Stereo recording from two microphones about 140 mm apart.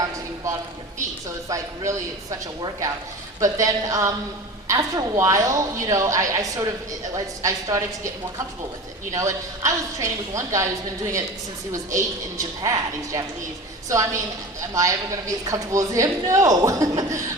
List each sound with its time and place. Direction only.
1.5 s a woman's voice: 20° right (ahead or behind)
3.4 s a woman's voice: 25° right (ahead or behind)
9.1 s a woman's voice: 25° right (ahead or behind)